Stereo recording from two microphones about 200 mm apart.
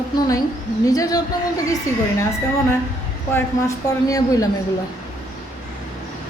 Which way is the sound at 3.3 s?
15° left (ahead or behind).